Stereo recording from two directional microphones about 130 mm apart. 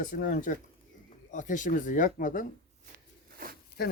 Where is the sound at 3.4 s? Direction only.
90° right.